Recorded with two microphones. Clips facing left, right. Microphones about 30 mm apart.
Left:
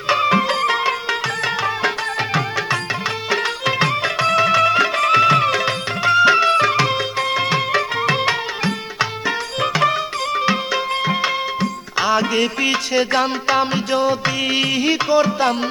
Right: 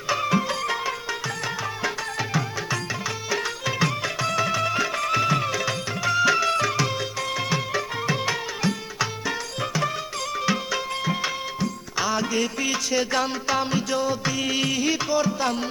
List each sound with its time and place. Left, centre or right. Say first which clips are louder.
0.1 s music: left 7 dB; left
3.2 s music: left 7 dB; left
7.7 s music: left 8 dB; left
9.6 s music: left 12 dB; left
10.4 s music: left 4 dB; left